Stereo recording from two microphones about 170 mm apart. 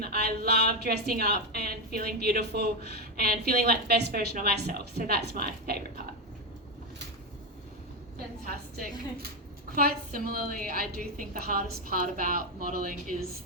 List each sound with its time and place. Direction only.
0.0 s a woman's voice: 65° right (ahead or behind)
8.4 s a woman's voice: 60° right (ahead or behind)